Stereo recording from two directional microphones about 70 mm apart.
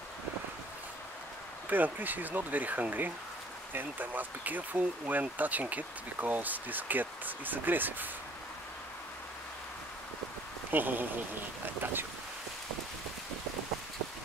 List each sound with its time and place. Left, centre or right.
1.7 s speech: right
10.7 s speech: right